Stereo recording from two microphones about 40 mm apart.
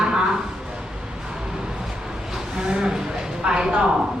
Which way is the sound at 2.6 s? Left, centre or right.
Centre.